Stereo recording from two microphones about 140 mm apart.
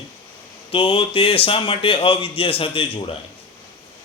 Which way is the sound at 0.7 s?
40° left (ahead or behind).